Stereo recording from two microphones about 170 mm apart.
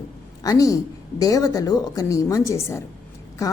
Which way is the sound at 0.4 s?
20° left (ahead or behind).